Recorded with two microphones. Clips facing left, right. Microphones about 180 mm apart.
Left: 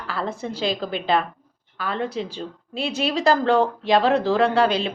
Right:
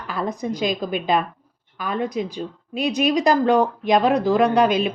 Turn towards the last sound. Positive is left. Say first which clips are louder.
# right 2 dB
turn(degrees=-15)  # may be behind; listen again after turning